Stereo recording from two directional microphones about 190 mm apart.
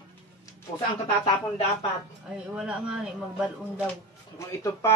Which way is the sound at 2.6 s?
5° right (ahead or behind).